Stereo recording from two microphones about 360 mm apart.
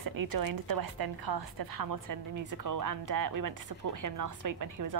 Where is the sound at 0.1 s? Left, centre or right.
Right.